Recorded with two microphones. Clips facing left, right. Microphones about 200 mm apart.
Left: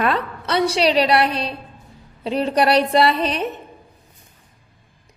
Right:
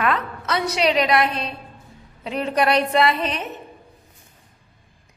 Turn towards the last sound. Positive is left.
turn(degrees=35)  # may be behind; listen again after turning